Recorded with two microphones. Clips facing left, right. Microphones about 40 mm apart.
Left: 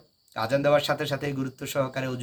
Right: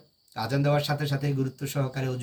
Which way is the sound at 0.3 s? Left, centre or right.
Left.